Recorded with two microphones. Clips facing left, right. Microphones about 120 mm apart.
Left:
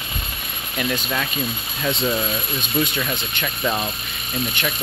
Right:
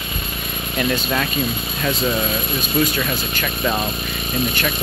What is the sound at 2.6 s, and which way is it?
Speech, 20° left (ahead or behind).